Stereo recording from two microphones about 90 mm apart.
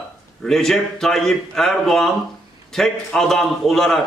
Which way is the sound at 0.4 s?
5° left (ahead or behind).